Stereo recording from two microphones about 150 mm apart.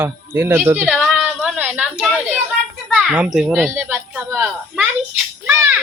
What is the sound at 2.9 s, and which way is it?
Speech, 10° right (ahead or behind).